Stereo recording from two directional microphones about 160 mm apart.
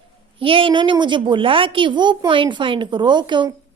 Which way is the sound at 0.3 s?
35° right (ahead or behind).